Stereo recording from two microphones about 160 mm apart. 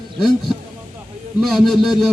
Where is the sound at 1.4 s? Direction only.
Centre (ahead or behind).